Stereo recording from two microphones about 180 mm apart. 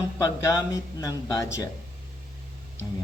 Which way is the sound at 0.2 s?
20° left (ahead or behind).